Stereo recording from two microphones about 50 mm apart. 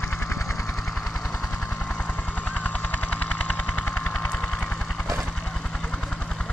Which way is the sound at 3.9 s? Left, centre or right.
Centre.